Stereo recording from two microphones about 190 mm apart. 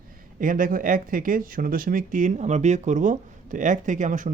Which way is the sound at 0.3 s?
45° right (ahead or behind).